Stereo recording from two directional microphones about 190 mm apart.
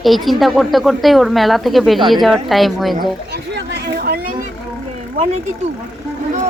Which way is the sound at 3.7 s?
55° right (ahead or behind).